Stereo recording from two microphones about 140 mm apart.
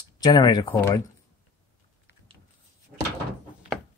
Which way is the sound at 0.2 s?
30° left (ahead or behind).